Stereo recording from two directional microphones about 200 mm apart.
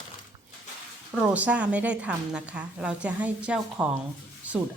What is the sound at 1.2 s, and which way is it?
A woman's voice, 5° right (ahead or behind).